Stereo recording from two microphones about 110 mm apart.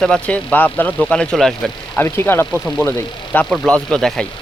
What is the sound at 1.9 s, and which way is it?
Speech, 20° left (ahead or behind).